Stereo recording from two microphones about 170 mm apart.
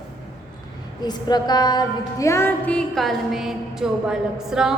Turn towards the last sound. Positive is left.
turn(degrees=-5)  # may be behind; listen again after turning